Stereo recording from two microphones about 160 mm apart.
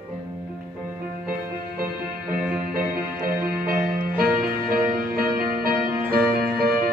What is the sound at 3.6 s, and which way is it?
Music, 65° right (ahead or behind).